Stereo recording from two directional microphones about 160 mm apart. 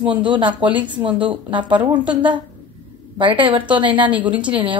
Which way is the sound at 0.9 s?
30° right (ahead or behind).